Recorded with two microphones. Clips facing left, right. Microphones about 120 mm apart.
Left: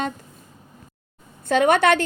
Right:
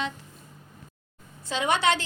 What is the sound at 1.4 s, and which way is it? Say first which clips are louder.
Speech: left 8 dB; 55° left (ahead or behind).